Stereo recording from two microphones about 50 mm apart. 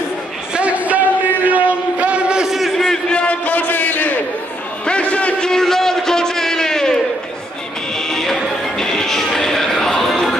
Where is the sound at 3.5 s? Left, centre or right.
Left.